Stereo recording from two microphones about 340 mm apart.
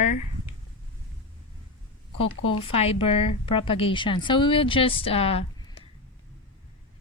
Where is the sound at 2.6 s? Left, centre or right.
Centre.